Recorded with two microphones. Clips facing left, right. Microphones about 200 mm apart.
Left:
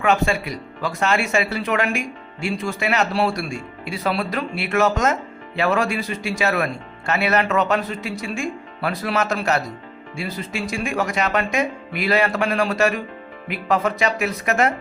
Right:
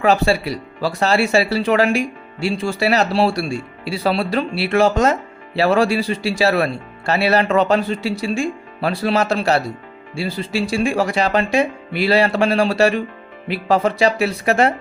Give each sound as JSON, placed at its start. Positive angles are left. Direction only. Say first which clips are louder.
{"t": 0.0, "sound": "speech", "louder": "right 4 dB", "side_deg": -35}